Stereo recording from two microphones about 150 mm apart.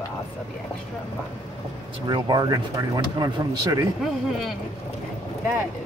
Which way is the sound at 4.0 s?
Centre (ahead or behind).